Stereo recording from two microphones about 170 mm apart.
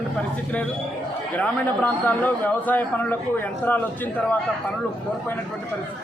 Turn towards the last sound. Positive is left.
turn(degrees=10)  # may be behind; listen again after turning